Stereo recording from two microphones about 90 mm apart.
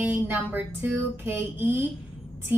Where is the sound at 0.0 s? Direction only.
20° right (ahead or behind).